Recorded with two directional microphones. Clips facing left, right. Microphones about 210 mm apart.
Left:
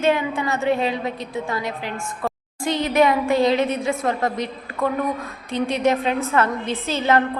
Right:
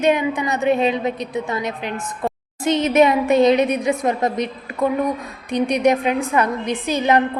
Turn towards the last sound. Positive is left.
turn(degrees=-15)  # may be behind; listen again after turning